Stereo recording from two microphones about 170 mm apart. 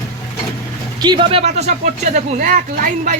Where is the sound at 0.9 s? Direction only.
25° right (ahead or behind).